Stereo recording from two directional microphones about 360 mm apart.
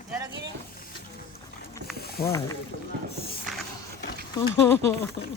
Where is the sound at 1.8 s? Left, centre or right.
Centre.